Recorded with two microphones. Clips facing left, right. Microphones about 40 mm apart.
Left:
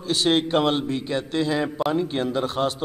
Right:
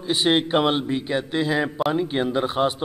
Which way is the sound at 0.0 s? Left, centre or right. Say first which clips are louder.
Right 1 dB; centre.